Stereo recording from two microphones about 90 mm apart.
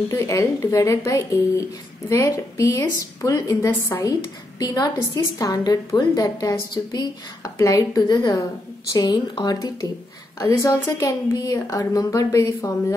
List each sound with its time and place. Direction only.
0.1 s a woman's voice: 35° left (ahead or behind)
8.9 s a woman's voice: 55° left (ahead or behind)
10.4 s speech: 35° left (ahead or behind)